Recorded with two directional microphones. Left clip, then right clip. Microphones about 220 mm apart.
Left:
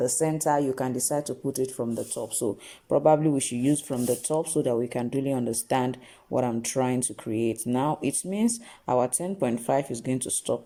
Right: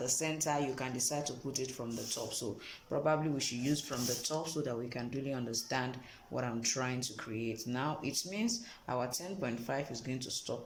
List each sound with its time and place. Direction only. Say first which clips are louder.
0.0 s speech: left 10 dB; 30° left (ahead or behind)
2.9 s speech: left 12 dB; 35° left (ahead or behind)